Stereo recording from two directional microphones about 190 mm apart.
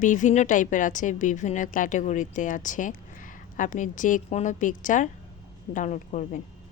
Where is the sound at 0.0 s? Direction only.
40° left (ahead or behind).